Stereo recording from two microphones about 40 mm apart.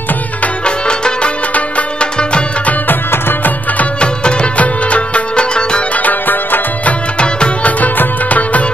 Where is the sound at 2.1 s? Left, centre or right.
Left.